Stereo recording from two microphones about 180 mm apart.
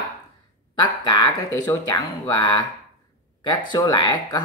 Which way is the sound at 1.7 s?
15° left (ahead or behind).